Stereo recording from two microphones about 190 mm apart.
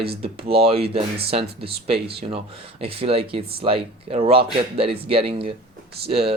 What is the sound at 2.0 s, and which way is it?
Speech, 30° right (ahead or behind).